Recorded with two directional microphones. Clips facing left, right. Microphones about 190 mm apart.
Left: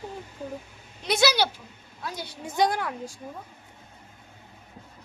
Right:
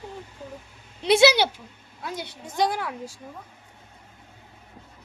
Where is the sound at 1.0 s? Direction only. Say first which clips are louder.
Right 6 dB; 25° right (ahead or behind).